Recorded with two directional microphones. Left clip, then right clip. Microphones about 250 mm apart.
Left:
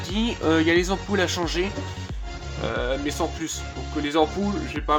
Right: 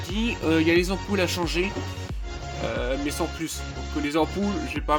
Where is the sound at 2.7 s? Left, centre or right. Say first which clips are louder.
Left 2 dB; right.